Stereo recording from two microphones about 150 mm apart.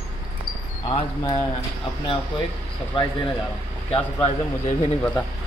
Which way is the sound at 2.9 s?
35° left (ahead or behind).